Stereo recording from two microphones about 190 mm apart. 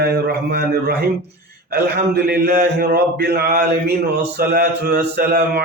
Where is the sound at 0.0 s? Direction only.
55° right (ahead or behind).